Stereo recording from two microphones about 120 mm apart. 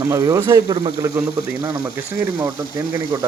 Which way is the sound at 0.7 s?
35° right (ahead or behind).